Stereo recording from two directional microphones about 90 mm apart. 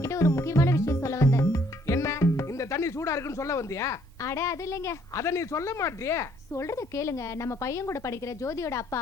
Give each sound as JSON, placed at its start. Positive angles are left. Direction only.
{"t": 0.0, "sound": "speech", "side_deg": 35}